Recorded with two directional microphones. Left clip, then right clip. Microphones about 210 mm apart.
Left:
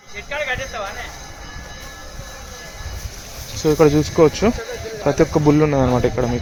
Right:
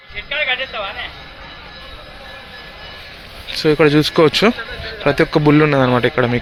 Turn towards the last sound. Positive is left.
turn(degrees=0)  # may be behind; listen again after turning